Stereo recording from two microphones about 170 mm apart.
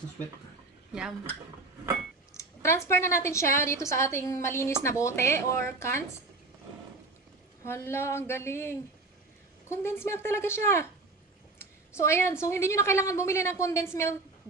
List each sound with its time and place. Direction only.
2.3 s a woman's voice: 15° left (ahead or behind)
7.6 s a woman's voice: 15° left (ahead or behind)